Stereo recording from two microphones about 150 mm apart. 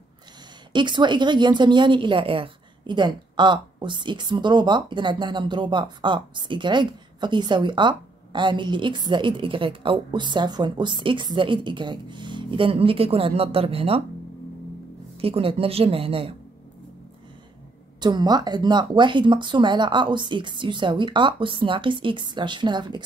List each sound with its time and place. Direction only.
0.7 s a woman's voice: 30° right (ahead or behind)
15.1 s a woman's voice: 40° right (ahead or behind)
18.0 s a woman's voice: 25° right (ahead or behind)